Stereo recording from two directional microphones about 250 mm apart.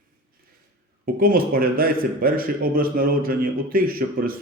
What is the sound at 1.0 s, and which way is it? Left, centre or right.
Speech, right.